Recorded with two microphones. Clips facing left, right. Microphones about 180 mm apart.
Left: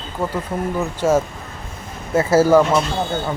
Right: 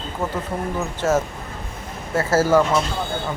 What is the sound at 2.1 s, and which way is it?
Speech, 15° left (ahead or behind).